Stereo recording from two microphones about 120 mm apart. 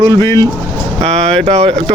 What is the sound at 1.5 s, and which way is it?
Speech, 65° right (ahead or behind).